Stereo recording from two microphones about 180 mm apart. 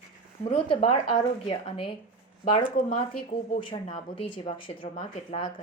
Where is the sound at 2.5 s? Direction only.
40° left (ahead or behind).